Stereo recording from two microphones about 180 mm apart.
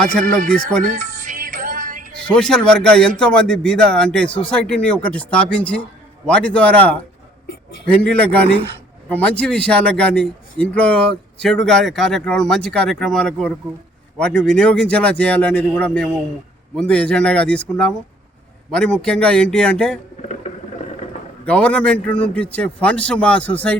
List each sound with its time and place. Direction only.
0.0 s speech: 5° left (ahead or behind)
0.9 s music: 50° right (ahead or behind)
2.2 s speech: 5° left (ahead or behind)
21.4 s speech: 5° left (ahead or behind)